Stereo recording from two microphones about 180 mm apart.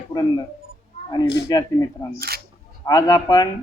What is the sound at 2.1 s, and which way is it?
Speech, 60° right (ahead or behind).